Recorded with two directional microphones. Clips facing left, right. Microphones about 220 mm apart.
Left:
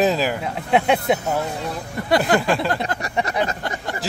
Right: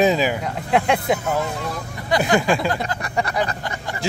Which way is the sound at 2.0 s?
50° left (ahead or behind).